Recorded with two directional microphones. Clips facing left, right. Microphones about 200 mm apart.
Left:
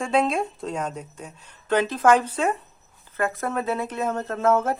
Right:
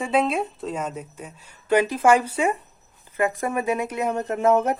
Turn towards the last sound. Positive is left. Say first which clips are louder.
# right 2 dB
turn(degrees=-15)  # may be behind; listen again after turning